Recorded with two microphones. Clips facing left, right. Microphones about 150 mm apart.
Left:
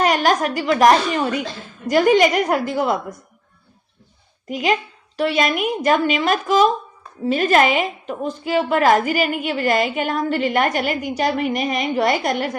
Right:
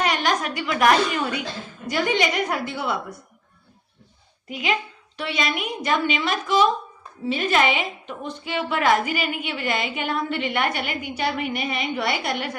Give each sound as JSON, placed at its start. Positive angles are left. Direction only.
{"t": 0.0, "sound": "a woman's voice", "side_deg": 40}
{"t": 1.9, "sound": "a woman's voice", "side_deg": 50}
{"t": 4.4, "sound": "a woman's voice", "side_deg": 40}